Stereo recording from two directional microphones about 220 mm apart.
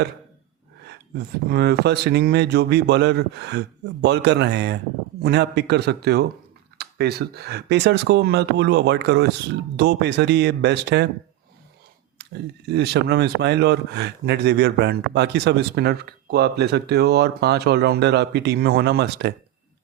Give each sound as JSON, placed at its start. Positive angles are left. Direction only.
{"t": 0.9, "sound": "speech", "side_deg": -45}
{"t": 12.2, "sound": "speech", "side_deg": -50}